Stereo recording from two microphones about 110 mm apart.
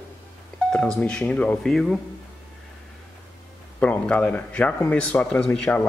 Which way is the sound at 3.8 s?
10° left (ahead or behind).